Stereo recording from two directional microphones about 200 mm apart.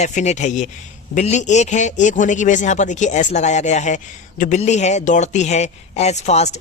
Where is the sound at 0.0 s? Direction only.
35° left (ahead or behind).